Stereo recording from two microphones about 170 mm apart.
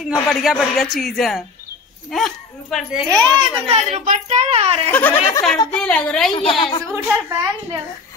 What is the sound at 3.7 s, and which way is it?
A woman's voice, 50° right (ahead or behind).